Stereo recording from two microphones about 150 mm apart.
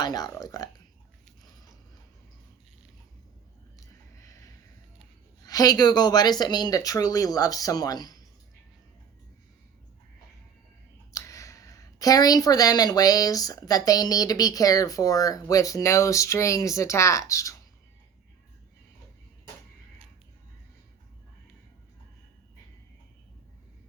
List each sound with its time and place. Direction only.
0.0 s speech: 25° left (ahead or behind)
3.8 s a sound: 20° left (ahead or behind)
5.4 s speech: 25° left (ahead or behind)
11.1 s speech: 20° left (ahead or behind)